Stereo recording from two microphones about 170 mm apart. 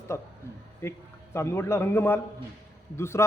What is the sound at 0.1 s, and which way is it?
A man's voice, 15° left (ahead or behind).